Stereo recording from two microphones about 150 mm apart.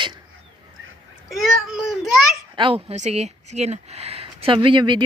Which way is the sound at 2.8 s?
50° right (ahead or behind).